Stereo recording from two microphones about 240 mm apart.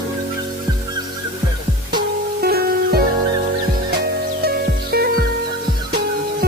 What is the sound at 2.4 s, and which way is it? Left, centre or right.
Music, right.